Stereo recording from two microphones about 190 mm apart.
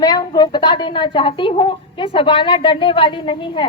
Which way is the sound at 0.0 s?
20° left (ahead or behind).